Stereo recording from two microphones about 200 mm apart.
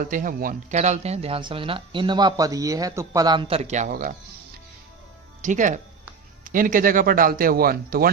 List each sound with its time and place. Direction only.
0.0 s speech: 40° right (ahead or behind)
5.4 s speech: 40° right (ahead or behind)